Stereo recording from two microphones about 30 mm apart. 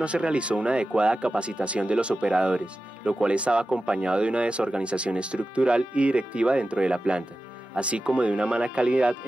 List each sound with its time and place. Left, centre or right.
0.0 s speech: right